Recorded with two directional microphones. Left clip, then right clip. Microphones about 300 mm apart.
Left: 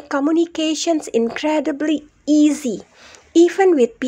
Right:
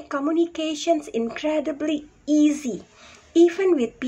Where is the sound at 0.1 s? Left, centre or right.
Left.